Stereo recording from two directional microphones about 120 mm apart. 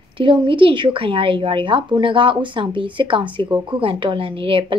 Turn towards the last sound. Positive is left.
turn(degrees=-45)  # may be behind; listen again after turning